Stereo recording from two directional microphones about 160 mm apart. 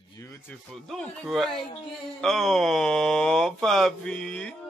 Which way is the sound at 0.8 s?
Centre (ahead or behind).